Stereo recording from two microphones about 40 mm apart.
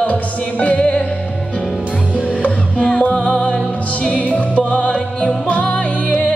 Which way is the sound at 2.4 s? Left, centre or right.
Left.